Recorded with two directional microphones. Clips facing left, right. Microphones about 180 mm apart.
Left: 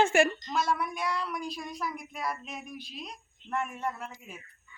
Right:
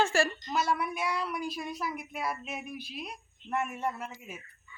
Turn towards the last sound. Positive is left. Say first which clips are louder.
# right 1 dB
turn(degrees=-5)  # may be behind; listen again after turning